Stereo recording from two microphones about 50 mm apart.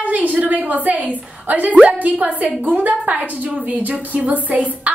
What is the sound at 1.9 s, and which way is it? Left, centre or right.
A woman's voice, right.